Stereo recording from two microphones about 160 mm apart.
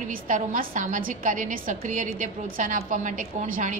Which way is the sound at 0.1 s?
60° right (ahead or behind).